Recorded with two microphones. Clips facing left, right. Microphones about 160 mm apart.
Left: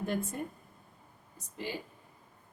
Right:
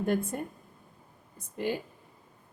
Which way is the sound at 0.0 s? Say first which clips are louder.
Right 5 dB; 55° right (ahead or behind).